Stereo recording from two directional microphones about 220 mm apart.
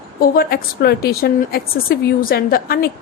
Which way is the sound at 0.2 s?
45° left (ahead or behind).